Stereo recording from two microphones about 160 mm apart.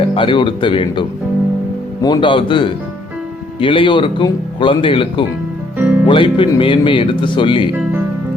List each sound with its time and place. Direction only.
0.2 s speech: 30° left (ahead or behind)
5.7 s music: 10° right (ahead or behind)
6.1 s speech: 30° left (ahead or behind)